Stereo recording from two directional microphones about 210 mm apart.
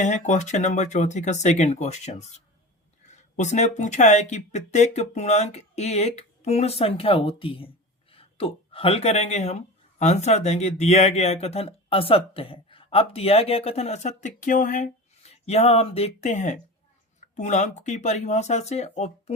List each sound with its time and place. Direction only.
0.0 s speech: 35° left (ahead or behind)
3.3 s speech: 35° left (ahead or behind)